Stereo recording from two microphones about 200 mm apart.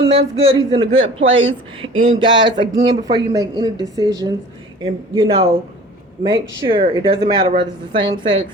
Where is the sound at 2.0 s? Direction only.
25° right (ahead or behind).